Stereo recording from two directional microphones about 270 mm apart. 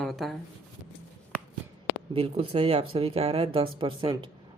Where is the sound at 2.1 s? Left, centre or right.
Right.